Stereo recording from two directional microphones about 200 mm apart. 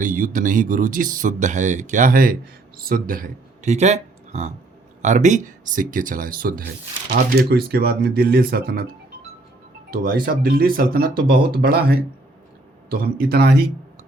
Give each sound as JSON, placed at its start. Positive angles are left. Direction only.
{"t": 0.0, "sound": "speech", "side_deg": -40}
{"t": 9.9, "sound": "speech", "side_deg": -50}